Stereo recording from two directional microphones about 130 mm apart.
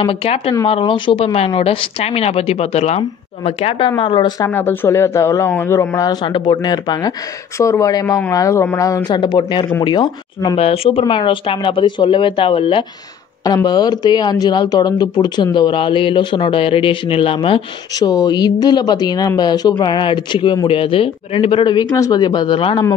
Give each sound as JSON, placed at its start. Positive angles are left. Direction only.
{"t": 0.0, "sound": "speech", "side_deg": 45}
{"t": 4.5, "sound": "speech", "side_deg": 15}
{"t": 6.2, "sound": "speech", "side_deg": 40}
{"t": 10.6, "sound": "speech", "side_deg": 50}
{"t": 17.9, "sound": "speech", "side_deg": 30}
{"t": 21.9, "sound": "speech", "side_deg": 25}